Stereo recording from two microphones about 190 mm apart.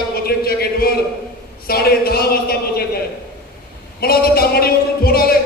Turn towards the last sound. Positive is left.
turn(degrees=55)  # may be behind; listen again after turning